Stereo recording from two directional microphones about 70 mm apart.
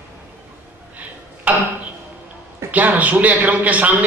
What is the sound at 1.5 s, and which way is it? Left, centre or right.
Speech, right.